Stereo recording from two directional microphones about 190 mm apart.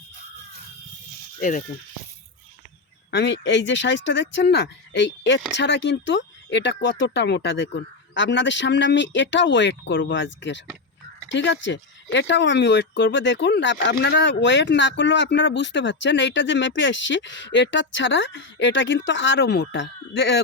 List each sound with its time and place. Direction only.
1.4 s speech: 40° left (ahead or behind)
3.1 s speech: 65° left (ahead or behind)